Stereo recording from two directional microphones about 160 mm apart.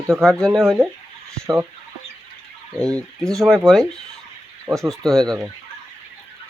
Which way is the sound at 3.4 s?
Centre (ahead or behind).